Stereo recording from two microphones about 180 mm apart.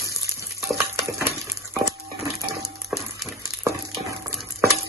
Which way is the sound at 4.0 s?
15° right (ahead or behind).